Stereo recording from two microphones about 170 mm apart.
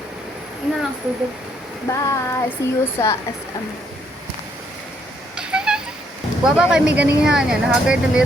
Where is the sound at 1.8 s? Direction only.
15° left (ahead or behind).